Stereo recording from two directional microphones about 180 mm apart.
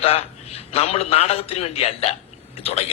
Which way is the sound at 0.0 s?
35° left (ahead or behind).